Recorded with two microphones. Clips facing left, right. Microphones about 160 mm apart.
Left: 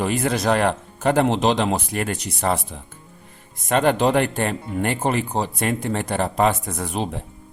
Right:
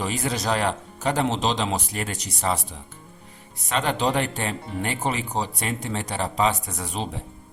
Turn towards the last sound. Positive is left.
turn(degrees=55)  # may be behind; listen again after turning